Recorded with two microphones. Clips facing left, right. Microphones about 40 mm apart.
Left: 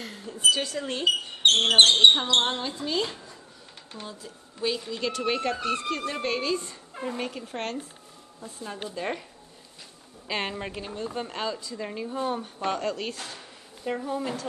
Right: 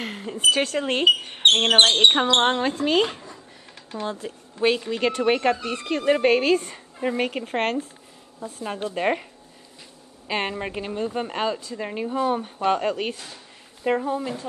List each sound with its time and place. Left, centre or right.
0.0 s speech: right
10.2 s a woman's voice: centre
13.1 s speech: left
13.9 s speech: right